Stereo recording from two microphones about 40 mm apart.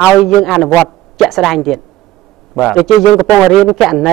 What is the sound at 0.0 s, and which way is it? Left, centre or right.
Speech, centre.